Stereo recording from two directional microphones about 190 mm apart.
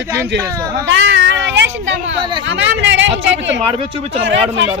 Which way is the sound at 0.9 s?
75° right (ahead or behind).